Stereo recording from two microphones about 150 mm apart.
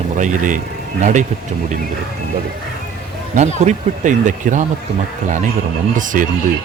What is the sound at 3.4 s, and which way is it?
Speech, 50° right (ahead or behind).